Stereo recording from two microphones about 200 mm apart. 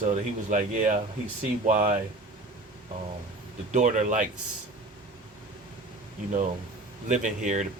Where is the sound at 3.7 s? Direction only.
40° right (ahead or behind).